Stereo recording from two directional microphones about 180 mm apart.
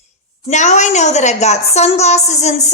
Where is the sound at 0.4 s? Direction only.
40° left (ahead or behind).